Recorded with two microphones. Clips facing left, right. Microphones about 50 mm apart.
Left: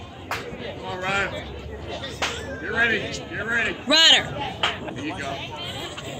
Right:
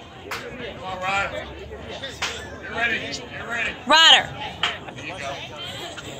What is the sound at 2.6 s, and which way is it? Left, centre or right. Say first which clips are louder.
Speech: left 3 dB; centre.